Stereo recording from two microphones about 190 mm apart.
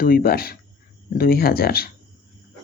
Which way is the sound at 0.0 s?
50° left (ahead or behind).